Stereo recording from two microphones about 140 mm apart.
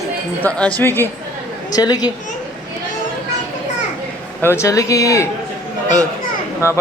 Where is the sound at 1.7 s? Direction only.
30° left (ahead or behind).